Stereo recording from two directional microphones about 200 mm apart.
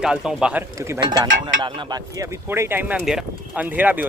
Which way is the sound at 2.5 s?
10° right (ahead or behind).